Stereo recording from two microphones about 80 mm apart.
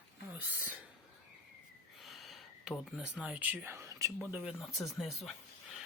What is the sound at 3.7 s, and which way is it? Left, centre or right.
Speech, right.